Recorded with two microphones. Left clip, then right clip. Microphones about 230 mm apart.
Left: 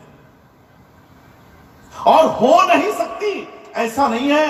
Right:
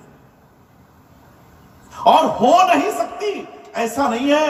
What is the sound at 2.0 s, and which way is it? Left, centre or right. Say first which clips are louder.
Speech: left 1 dB; right.